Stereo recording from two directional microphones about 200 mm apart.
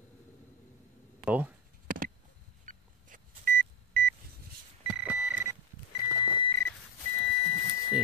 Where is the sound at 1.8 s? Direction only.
45° right (ahead or behind).